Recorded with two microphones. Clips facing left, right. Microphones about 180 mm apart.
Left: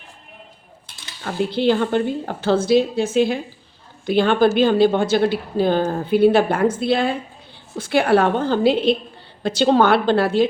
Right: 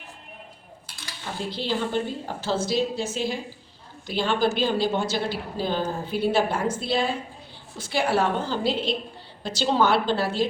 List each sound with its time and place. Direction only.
1.2 s a woman's voice: 60° left (ahead or behind)